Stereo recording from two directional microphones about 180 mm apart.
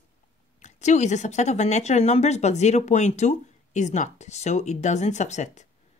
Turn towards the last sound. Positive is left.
turn(degrees=40)  # may be behind; listen again after turning